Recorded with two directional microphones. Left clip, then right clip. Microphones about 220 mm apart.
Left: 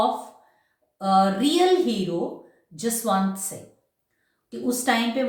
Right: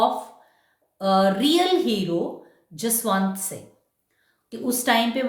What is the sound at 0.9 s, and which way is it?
Speech, 40° right (ahead or behind).